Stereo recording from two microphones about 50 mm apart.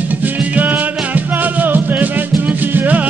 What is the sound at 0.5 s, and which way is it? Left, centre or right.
Music, right.